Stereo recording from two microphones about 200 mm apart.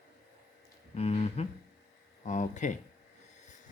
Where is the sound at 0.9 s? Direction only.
30° left (ahead or behind).